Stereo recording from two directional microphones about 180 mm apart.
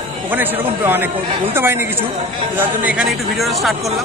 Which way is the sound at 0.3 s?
10° right (ahead or behind).